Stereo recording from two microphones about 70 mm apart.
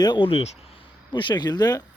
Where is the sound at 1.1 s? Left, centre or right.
Left.